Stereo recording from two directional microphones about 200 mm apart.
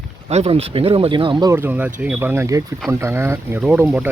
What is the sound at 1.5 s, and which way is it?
Speech, 10° right (ahead or behind).